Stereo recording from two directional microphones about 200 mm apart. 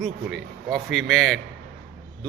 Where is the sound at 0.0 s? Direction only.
Centre (ahead or behind).